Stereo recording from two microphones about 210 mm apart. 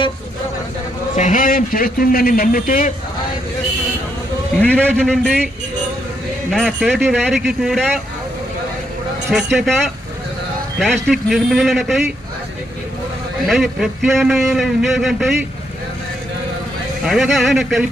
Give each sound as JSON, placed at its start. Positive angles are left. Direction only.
{"t": 1.1, "sound": "a man's voice", "side_deg": 35}
{"t": 4.9, "sound": "speech", "side_deg": 5}
{"t": 6.5, "sound": "speech", "side_deg": 0}
{"t": 9.3, "sound": "speech", "side_deg": 0}
{"t": 13.5, "sound": "speech", "side_deg": 0}
{"t": 17.1, "sound": "speech", "side_deg": 0}